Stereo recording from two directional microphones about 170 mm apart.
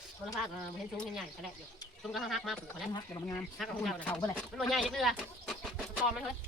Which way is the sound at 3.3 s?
5° left (ahead or behind).